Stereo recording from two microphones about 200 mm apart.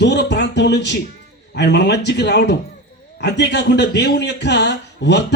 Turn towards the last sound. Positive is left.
turn(degrees=60)  # may be behind; listen again after turning